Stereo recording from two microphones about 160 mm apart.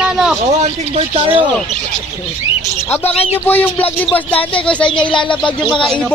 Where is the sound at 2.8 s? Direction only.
15° left (ahead or behind).